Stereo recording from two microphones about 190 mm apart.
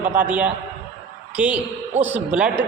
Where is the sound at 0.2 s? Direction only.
5° right (ahead or behind).